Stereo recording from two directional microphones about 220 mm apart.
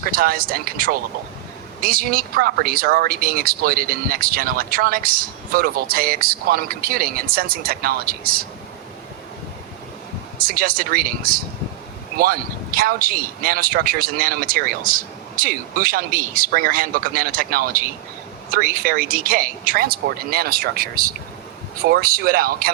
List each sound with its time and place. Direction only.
0.0 s speech: 40° right (ahead or behind)
10.3 s speech: 40° right (ahead or behind)